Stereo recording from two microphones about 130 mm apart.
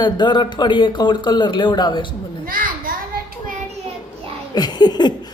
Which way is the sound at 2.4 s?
90° right.